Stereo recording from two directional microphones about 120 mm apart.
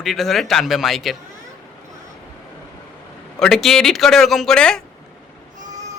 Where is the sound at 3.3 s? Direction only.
5° left (ahead or behind).